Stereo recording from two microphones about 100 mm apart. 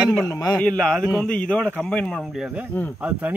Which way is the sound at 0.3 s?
40° left (ahead or behind).